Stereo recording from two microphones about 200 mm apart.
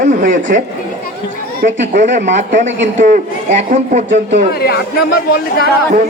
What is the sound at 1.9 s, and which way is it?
A man's voice, 40° right (ahead or behind).